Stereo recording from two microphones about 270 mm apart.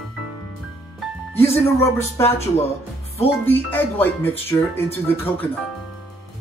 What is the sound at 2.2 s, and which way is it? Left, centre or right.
Speech, left.